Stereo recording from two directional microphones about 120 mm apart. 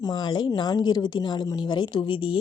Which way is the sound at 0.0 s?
40° left (ahead or behind).